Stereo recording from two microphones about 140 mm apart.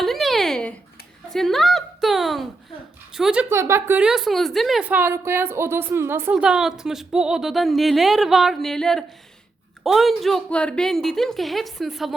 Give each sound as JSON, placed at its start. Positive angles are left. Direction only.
{"t": 0.0, "sound": "a sound", "side_deg": 0}
{"t": 1.3, "sound": "a woman's voice", "side_deg": 0}
{"t": 3.5, "sound": "a woman's voice", "side_deg": -20}
{"t": 4.8, "sound": "a woman's voice", "side_deg": -10}
{"t": 6.3, "sound": "a woman's voice", "side_deg": -5}